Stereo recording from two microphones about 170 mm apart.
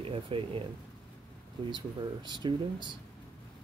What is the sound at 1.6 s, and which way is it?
Speech, 25° right (ahead or behind).